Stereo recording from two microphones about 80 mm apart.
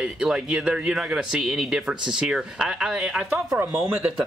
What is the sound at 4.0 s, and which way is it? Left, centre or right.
Speech, centre.